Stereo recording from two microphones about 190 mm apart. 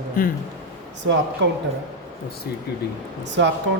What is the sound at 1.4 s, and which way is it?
Speech, 70° right (ahead or behind).